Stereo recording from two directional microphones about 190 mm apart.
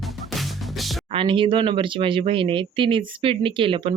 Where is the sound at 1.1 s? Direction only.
25° right (ahead or behind).